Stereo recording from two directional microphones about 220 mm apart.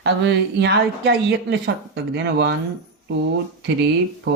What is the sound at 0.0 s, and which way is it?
A woman's voice, 50° right (ahead or behind).